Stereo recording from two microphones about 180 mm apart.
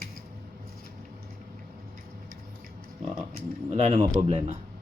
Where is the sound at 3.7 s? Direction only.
35° right (ahead or behind).